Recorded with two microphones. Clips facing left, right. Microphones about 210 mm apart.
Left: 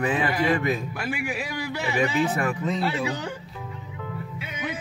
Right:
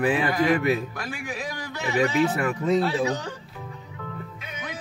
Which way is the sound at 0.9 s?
10° left (ahead or behind).